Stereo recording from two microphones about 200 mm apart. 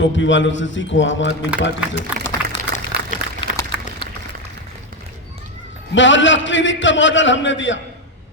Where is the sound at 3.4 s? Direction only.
25° left (ahead or behind).